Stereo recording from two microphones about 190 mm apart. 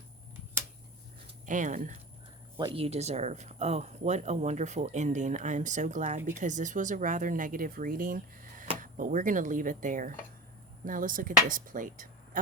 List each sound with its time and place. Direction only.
1.5 s speech: 40° right (ahead or behind)
2.6 s speech: 25° right (ahead or behind); by 12.4 s 45° right (ahead or behind)